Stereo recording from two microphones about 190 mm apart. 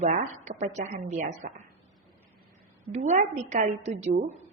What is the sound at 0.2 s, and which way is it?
Speech, 40° right (ahead or behind).